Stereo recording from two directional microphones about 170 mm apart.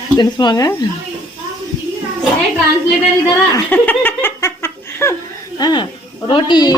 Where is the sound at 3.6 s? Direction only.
10° left (ahead or behind).